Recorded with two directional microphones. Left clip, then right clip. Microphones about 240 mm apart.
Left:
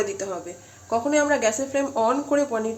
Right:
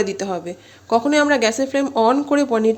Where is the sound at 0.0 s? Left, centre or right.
Right.